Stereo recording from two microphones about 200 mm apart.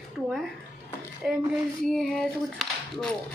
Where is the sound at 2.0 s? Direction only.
Centre (ahead or behind).